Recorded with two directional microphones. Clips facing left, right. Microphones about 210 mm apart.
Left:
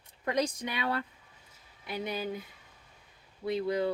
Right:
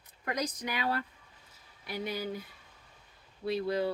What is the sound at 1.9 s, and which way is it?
Speech, 20° left (ahead or behind).